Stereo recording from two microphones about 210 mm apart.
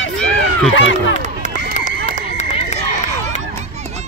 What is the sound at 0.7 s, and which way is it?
Speech, 60° left (ahead or behind).